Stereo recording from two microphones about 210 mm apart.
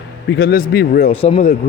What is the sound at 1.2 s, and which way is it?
Speech, 25° left (ahead or behind).